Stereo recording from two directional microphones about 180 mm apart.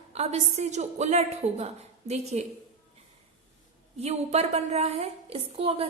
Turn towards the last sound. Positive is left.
turn(degrees=-35)  # may be behind; listen again after turning